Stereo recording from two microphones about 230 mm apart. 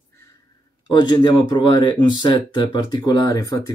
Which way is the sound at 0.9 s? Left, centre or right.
Centre.